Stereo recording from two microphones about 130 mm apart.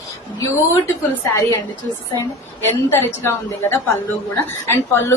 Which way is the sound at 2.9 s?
20° left (ahead or behind).